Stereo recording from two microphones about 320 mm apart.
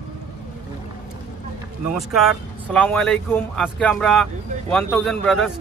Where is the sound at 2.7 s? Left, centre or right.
Centre.